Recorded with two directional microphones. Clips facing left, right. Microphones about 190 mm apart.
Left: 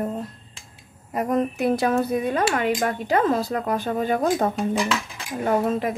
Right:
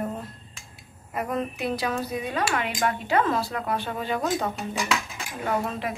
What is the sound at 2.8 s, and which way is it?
A woman's voice, 40° left (ahead or behind).